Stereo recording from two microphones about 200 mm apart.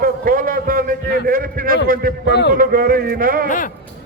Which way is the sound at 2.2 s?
60° left (ahead or behind).